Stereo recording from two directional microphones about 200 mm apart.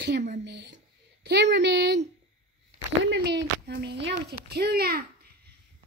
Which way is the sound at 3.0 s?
60° right (ahead or behind).